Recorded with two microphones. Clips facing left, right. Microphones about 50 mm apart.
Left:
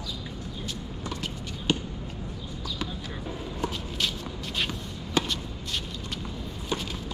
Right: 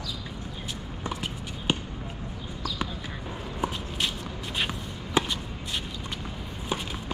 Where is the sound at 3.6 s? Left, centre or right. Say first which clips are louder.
Right 1 dB; centre.